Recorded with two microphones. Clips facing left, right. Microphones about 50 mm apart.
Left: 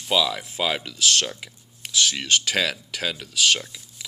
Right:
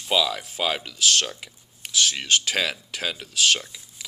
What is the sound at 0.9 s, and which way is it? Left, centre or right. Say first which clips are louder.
Speech: right 1 dB; right.